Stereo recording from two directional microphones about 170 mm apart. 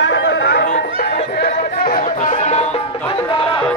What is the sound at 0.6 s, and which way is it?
Music, 55° left (ahead or behind).